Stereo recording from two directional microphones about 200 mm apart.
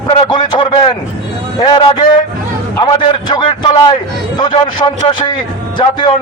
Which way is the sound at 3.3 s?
25° left (ahead or behind).